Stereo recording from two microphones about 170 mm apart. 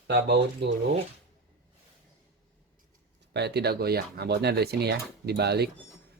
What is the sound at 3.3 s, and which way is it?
Speech, 75° right (ahead or behind).